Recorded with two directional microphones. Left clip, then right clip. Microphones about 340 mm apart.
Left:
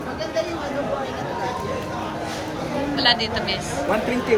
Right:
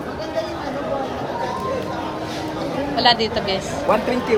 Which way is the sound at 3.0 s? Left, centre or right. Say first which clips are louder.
Right 3 dB; centre.